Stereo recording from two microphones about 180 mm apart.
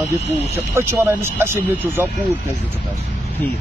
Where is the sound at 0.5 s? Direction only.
15° right (ahead or behind).